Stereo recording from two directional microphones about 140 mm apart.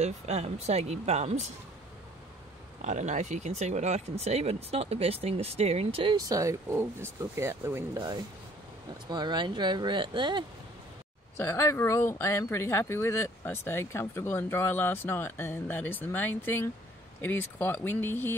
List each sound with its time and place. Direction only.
0.0 s speech: 50° right (ahead or behind)
2.8 s speech: 60° right (ahead or behind); by 10.4 s 35° right (ahead or behind)
11.3 s speech: 20° left (ahead or behind)